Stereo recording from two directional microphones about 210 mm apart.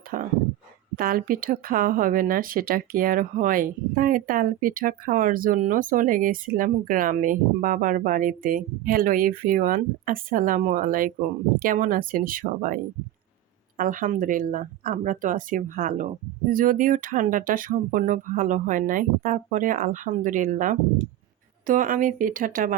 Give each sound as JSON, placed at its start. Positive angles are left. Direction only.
{"t": 0.1, "sound": "speech", "side_deg": -40}